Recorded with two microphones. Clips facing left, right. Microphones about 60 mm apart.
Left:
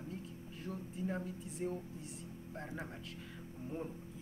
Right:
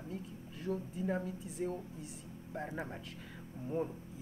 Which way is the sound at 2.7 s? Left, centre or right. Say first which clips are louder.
Right 3 dB; centre.